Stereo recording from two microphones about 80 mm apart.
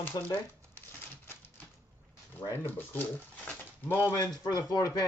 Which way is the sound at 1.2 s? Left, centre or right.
Left.